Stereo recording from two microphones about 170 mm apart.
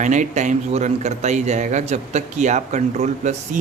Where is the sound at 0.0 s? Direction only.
45° right (ahead or behind).